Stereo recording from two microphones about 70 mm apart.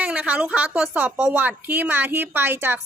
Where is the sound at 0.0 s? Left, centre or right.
Right.